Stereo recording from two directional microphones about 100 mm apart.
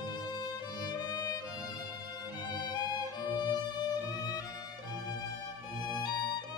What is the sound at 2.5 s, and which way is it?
Music, 45° left (ahead or behind).